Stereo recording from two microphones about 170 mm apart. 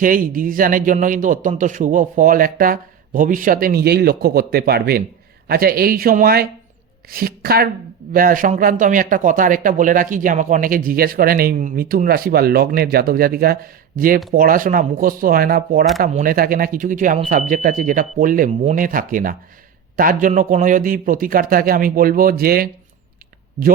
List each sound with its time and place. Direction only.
0.0 s speech: 55° right (ahead or behind)